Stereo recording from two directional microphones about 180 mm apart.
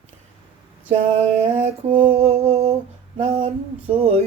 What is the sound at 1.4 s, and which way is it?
Speech, 30° right (ahead or behind).